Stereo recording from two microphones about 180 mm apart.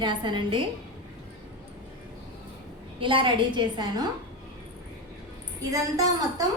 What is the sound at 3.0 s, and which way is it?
A woman's voice, 25° right (ahead or behind).